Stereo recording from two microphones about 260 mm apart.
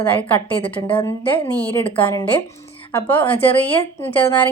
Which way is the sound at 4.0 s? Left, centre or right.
Centre.